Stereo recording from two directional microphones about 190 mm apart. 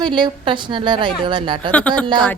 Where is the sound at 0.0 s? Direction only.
25° right (ahead or behind).